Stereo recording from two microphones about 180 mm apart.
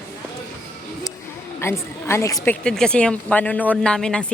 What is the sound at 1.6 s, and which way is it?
A woman's voice, 15° left (ahead or behind).